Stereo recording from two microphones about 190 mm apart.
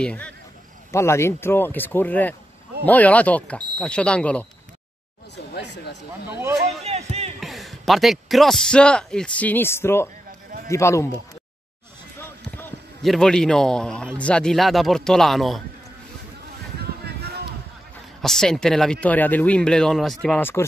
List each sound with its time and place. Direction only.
0.0 s speech: 5° left (ahead or behind)
5.5 s a sound: 65° left (ahead or behind)
6.8 s music: 35° right (ahead or behind)
7.3 s a man's voice: centre (ahead or behind)
12.2 s speech: 10° left (ahead or behind)
17.0 s a sound: 55° right (ahead or behind)
18.2 s speech: centre (ahead or behind)